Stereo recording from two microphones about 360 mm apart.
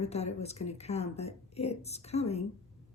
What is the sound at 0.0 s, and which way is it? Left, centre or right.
A woman's voice, centre.